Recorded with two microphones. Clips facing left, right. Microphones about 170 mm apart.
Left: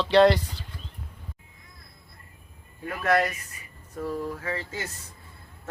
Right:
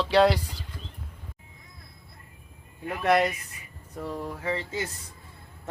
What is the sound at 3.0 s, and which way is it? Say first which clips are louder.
Speech: right 1 dB; 20° right (ahead or behind).